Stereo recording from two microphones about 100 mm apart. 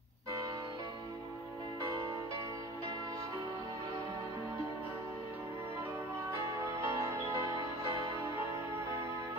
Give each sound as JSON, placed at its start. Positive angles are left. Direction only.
{"t": 6.3, "sound": "music", "side_deg": -30}